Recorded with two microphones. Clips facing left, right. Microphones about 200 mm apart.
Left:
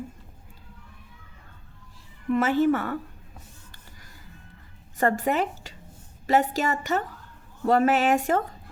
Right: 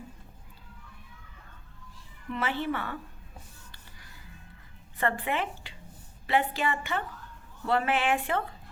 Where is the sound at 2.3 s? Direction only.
45° left (ahead or behind).